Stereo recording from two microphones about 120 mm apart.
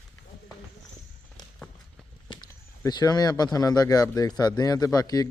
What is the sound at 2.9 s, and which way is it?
Speech, 35° left (ahead or behind).